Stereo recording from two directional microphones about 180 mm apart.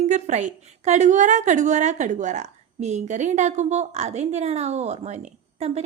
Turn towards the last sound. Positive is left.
turn(degrees=-40)  # may be behind; listen again after turning